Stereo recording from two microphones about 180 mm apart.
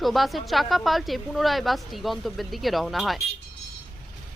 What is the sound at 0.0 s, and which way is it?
Speech, centre (ahead or behind).